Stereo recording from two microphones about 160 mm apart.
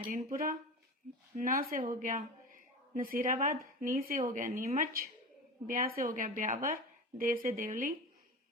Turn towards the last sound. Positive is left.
turn(degrees=-55)  # may be behind; listen again after turning